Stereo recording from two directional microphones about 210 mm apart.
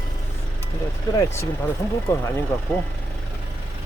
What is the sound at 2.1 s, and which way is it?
Speech, 10° left (ahead or behind).